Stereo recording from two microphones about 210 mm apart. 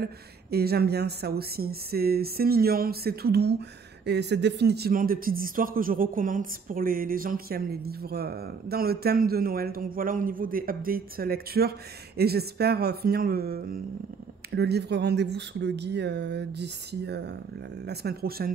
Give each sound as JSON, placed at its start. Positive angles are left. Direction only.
{"t": 0.0, "sound": "speech", "side_deg": -50}